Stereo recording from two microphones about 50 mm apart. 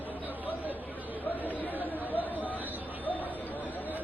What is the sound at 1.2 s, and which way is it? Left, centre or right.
Chatter, left.